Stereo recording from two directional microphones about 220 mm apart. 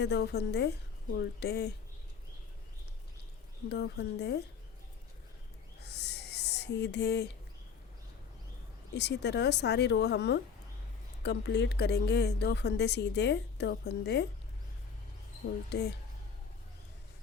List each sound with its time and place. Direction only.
0.0 s a woman's voice: 50° left (ahead or behind)
3.7 s a woman's voice: 50° left (ahead or behind)
5.8 s a sound: 50° left (ahead or behind)
9.0 s a woman's voice: 50° left (ahead or behind)
15.7 s a woman's voice: 50° left (ahead or behind)